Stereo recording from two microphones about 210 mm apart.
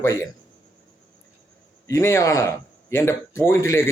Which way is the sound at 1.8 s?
10° left (ahead or behind).